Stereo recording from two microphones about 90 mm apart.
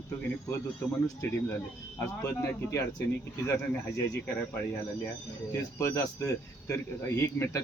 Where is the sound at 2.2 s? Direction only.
30° left (ahead or behind).